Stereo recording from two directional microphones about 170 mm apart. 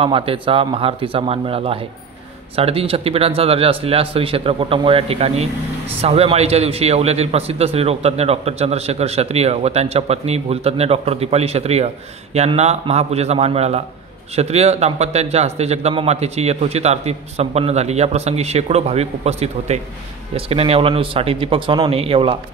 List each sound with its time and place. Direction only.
0.0 s a man's voice: 35° right (ahead or behind)